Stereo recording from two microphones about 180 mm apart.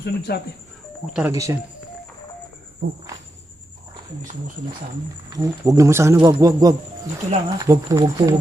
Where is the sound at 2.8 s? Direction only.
55° right (ahead or behind).